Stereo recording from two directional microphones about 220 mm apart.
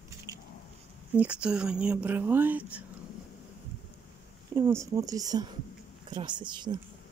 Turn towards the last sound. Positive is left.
turn(degrees=-20)  # may be behind; listen again after turning